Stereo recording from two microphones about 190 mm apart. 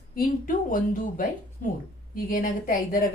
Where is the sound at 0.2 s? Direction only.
45° left (ahead or behind).